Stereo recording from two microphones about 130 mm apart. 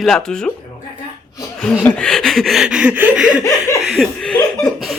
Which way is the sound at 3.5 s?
25° left (ahead or behind).